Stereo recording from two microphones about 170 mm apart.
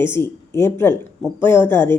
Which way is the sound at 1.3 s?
25° right (ahead or behind).